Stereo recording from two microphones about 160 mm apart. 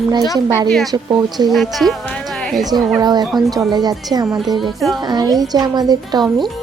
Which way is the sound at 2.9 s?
25° right (ahead or behind).